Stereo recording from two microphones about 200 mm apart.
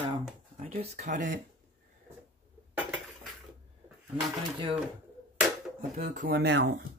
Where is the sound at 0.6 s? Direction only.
35° right (ahead or behind).